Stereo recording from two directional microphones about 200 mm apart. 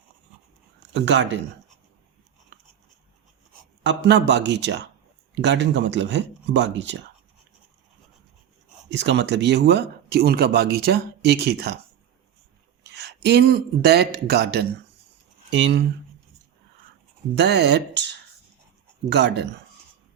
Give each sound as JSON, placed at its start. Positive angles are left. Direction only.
{"t": 0.9, "sound": "speech", "side_deg": -65}
{"t": 3.8, "sound": "speech", "side_deg": -60}
{"t": 8.9, "sound": "speech", "side_deg": -60}
{"t": 12.8, "sound": "speech", "side_deg": -55}
{"t": 17.3, "sound": "speech", "side_deg": -55}